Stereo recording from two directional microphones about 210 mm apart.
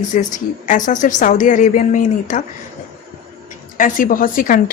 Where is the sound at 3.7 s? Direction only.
40° left (ahead or behind).